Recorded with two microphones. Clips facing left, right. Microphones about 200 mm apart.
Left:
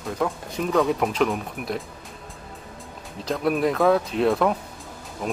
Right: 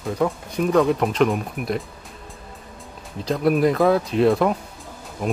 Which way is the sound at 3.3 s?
Centre (ahead or behind).